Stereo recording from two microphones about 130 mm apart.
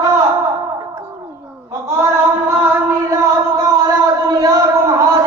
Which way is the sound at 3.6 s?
30° right (ahead or behind).